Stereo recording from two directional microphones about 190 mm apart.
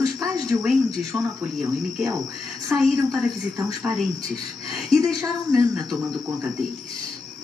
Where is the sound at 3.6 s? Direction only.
15° right (ahead or behind).